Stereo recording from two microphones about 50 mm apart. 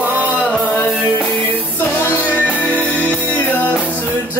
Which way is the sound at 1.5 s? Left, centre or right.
Left.